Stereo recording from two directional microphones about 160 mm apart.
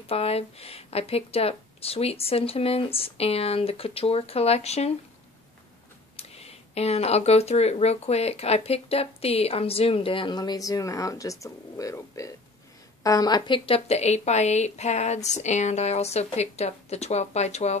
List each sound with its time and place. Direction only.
0.0 s speech: 40° left (ahead or behind)
6.1 s a woman's voice: 40° left (ahead or behind)